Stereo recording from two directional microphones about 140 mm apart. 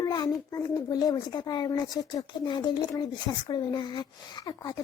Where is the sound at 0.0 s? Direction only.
25° left (ahead or behind).